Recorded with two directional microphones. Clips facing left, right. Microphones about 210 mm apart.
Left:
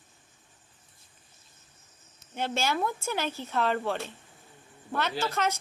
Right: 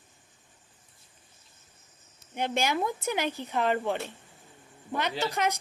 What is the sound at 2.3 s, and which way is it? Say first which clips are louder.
A woman's voice: right 1 dB; 15° right (ahead or behind).